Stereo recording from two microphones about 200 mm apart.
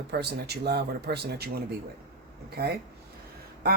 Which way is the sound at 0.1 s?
55° right (ahead or behind).